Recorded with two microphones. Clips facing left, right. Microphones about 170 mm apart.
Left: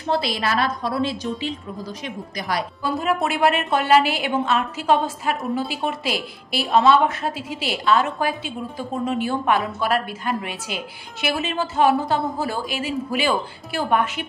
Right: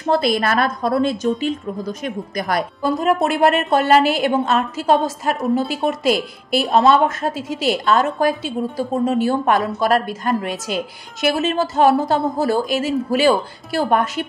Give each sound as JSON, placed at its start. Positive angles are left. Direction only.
{"t": 0.0, "sound": "a woman's voice", "side_deg": -50}